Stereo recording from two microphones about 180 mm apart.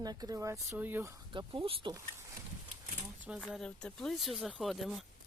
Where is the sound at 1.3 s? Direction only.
30° right (ahead or behind).